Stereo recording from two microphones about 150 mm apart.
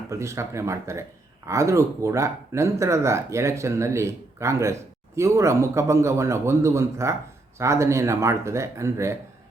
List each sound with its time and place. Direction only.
0.1 s speech: 20° right (ahead or behind)